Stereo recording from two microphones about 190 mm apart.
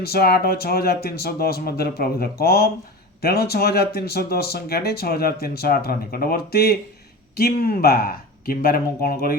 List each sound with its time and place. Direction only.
0.0 s speech: 55° left (ahead or behind)